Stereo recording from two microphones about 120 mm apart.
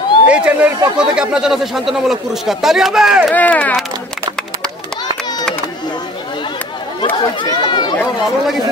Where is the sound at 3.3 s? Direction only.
15° left (ahead or behind).